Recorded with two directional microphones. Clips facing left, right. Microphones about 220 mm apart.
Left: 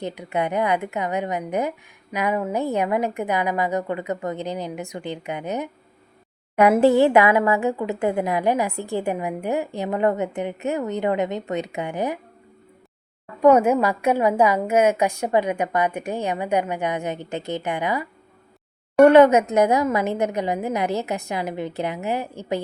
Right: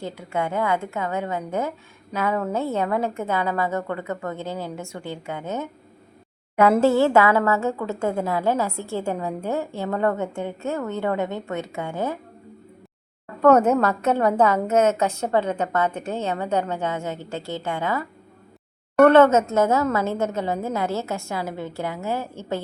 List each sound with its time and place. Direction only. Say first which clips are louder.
0.0 s a woman's voice: left 2 dB; 20° left (ahead or behind)
13.4 s a woman's voice: left 1 dB; 10° left (ahead or behind)